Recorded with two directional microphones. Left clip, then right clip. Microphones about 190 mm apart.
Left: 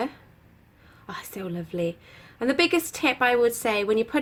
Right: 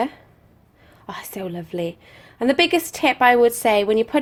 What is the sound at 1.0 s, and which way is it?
A woman's voice, 30° right (ahead or behind).